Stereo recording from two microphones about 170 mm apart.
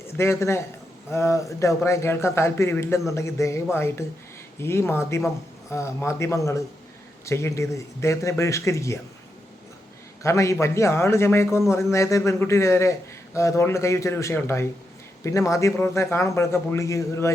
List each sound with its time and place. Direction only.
0.2 s a man's voice: 15° left (ahead or behind)
10.2 s a man's voice: 15° left (ahead or behind)